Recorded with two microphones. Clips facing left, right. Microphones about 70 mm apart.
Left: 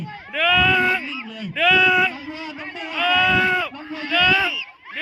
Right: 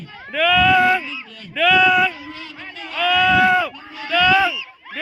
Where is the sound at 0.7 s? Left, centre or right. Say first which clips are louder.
Right 4 dB; centre.